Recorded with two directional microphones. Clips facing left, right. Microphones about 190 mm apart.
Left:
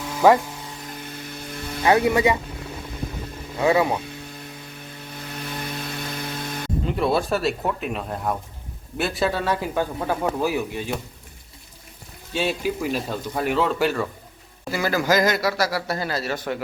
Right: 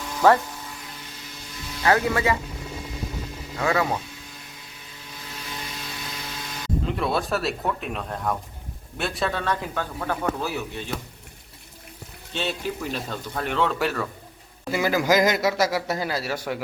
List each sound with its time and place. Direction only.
0.2 s a man's voice: 10° left (ahead or behind)
0.9 s vehicle: 55° left (ahead or behind)
1.8 s a man's voice: 15° left (ahead or behind)
3.6 s a man's voice: 20° left (ahead or behind)
5.1 s chainsaw: 55° left (ahead or behind)
6.8 s a man's voice: centre (ahead or behind)
12.3 s a man's voice: 10° left (ahead or behind)
14.7 s a man's voice: 15° right (ahead or behind)